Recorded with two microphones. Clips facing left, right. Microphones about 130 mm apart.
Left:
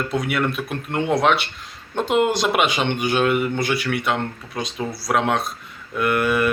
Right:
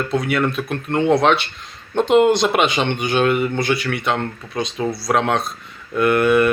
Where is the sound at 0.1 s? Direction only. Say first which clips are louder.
Right 3 dB; 10° left (ahead or behind).